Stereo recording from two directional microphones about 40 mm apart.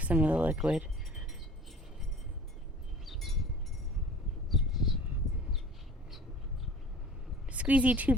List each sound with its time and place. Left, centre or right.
0.0 s speech: right
0.5 s wind chime: right
3.1 s wind chime: centre
4.4 s a sound: centre
7.5 s speech: right